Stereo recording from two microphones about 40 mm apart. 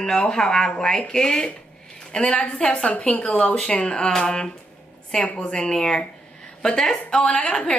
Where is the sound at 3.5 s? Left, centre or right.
Left.